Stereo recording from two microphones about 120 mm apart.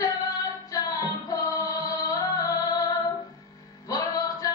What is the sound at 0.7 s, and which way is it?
Music, 30° left (ahead or behind).